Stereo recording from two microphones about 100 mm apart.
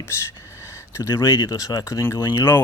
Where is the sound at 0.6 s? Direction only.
30° left (ahead or behind).